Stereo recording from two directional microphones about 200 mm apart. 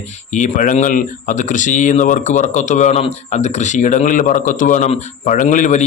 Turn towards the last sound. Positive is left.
turn(degrees=35)  # may be behind; listen again after turning